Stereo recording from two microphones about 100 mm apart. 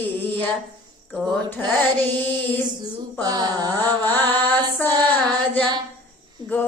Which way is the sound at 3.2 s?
40° right (ahead or behind).